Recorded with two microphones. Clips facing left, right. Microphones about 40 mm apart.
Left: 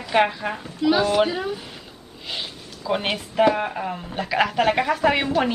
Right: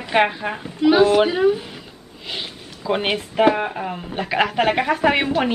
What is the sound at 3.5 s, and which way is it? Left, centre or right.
Speech, centre.